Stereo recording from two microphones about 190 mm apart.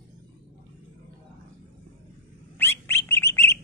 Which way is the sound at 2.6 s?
10° left (ahead or behind).